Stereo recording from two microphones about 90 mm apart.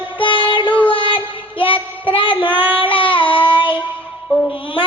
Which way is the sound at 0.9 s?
65° left (ahead or behind).